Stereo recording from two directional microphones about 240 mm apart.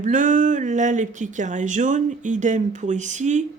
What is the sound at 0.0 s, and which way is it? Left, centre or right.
Speech, right.